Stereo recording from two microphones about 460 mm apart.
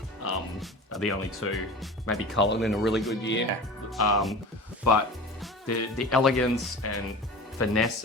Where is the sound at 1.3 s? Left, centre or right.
Left.